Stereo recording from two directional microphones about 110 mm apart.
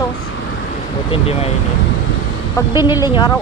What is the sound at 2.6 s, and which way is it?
Speech, 30° left (ahead or behind).